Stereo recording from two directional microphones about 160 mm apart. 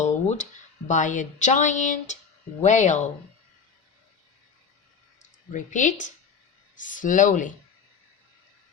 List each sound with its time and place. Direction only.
0.0 s a sound: 45° left (ahead or behind)
0.9 s speech: 50° left (ahead or behind)
5.5 s speech: 50° left (ahead or behind)